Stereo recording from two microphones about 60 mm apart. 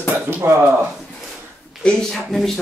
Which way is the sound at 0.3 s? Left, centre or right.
Right.